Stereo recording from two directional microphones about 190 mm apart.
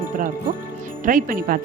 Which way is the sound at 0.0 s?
45° right (ahead or behind).